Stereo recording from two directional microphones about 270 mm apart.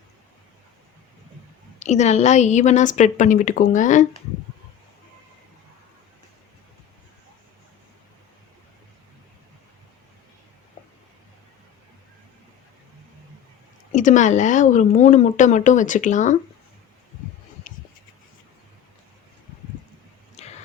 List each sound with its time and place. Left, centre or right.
1.8 s speech: left
13.9 s speech: left
20.4 s a sound: left